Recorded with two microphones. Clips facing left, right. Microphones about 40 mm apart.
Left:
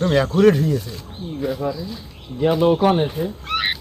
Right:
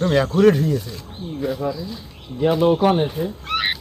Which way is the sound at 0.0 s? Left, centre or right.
Centre.